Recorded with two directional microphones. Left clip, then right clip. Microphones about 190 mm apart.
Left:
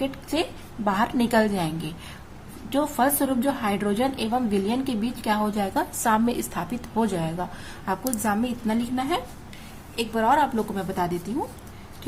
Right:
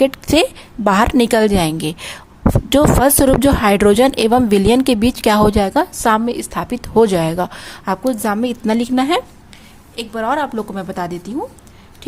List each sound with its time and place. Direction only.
0.0 s a woman's voice: 55° right (ahead or behind)
9.9 s a woman's voice: 35° right (ahead or behind)